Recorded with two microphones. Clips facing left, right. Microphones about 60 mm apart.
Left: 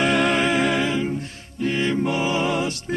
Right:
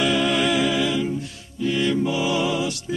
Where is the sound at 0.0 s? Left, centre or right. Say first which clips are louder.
Left 1 dB; left.